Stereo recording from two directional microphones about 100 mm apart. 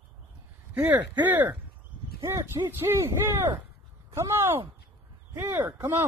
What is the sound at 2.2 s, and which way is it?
Speech, 30° right (ahead or behind).